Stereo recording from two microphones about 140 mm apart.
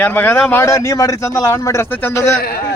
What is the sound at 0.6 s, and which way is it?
A man's voice, 20° left (ahead or behind).